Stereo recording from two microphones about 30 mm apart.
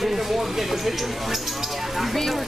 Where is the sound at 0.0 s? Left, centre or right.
Centre.